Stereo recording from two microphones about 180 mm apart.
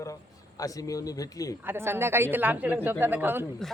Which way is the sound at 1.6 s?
15° right (ahead or behind).